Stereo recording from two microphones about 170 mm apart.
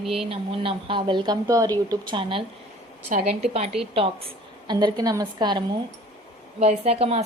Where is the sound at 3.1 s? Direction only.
50° right (ahead or behind).